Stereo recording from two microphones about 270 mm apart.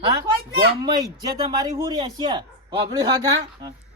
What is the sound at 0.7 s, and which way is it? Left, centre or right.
Speech, centre.